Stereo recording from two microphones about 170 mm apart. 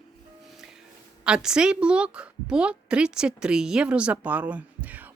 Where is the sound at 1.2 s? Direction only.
5° right (ahead or behind).